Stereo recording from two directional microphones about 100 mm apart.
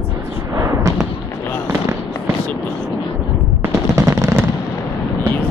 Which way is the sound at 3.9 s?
30° right (ahead or behind).